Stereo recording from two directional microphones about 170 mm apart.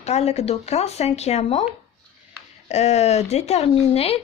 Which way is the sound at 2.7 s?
40° left (ahead or behind).